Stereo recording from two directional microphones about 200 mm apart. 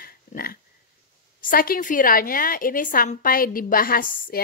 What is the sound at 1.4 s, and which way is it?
A woman's voice, 45° left (ahead or behind).